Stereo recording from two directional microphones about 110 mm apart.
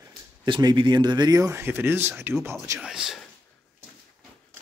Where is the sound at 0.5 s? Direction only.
45° right (ahead or behind); by 2.3 s 20° right (ahead or behind).